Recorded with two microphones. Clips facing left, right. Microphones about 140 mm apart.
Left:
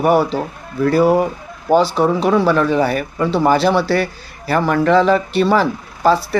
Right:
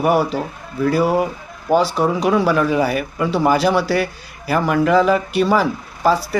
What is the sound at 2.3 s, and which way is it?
Speech, 5° right (ahead or behind).